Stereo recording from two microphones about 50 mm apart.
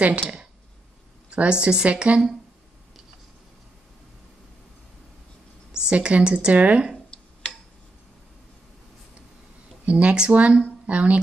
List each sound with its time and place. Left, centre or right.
1.3 s a woman's voice: right
5.7 s a sound: centre
5.9 s a woman's voice: right
9.8 s a woman's voice: right